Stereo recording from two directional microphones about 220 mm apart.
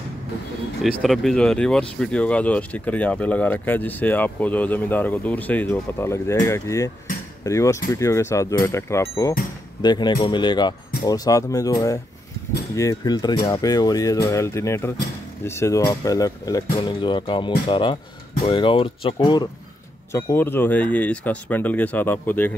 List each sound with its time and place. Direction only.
0.8 s speech: centre (ahead or behind)